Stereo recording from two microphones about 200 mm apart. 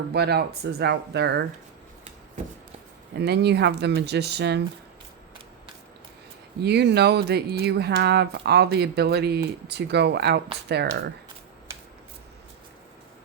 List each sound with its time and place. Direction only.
0.1 s speech: 55° right (ahead or behind)
3.2 s speech: 55° right (ahead or behind)
6.6 s speech: 55° right (ahead or behind)